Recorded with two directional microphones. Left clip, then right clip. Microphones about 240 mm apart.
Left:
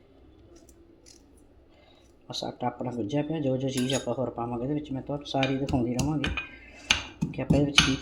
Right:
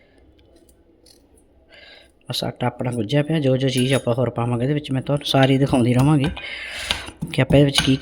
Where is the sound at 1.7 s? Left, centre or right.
Right.